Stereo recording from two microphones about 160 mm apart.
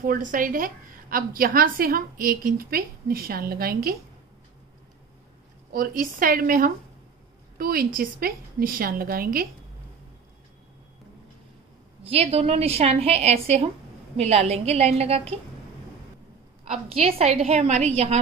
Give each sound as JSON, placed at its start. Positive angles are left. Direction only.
{"t": 0.0, "sound": "a woman's voice", "side_deg": -60}
{"t": 5.7, "sound": "a woman's voice", "side_deg": -60}
{"t": 12.0, "sound": "a woman's voice", "side_deg": -40}
{"t": 16.9, "sound": "a woman's voice", "side_deg": -40}